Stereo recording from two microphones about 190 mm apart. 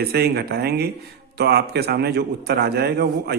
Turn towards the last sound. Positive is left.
turn(degrees=-60)  # may be behind; listen again after turning